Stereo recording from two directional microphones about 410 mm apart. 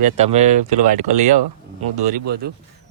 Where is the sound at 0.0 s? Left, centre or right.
Centre.